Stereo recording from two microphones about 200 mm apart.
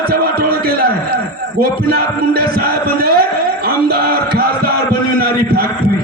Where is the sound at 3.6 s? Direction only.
50° right (ahead or behind).